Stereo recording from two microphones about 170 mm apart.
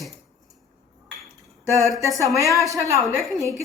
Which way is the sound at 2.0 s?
20° right (ahead or behind).